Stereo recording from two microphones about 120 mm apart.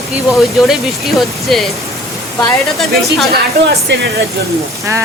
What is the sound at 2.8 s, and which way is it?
Speech, centre (ahead or behind).